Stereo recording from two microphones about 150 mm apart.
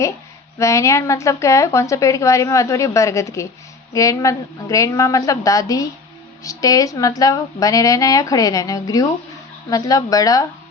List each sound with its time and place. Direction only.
0.6 s a woman's voice: 20° left (ahead or behind)